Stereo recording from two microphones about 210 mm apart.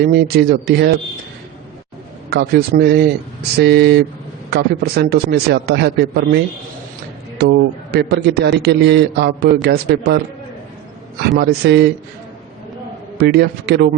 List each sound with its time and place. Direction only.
0.0 s a man's voice: 45° right (ahead or behind)
2.3 s a man's voice: 50° right (ahead or behind)
11.3 s a man's voice: 50° right (ahead or behind)
13.1 s a man's voice: 50° right (ahead or behind)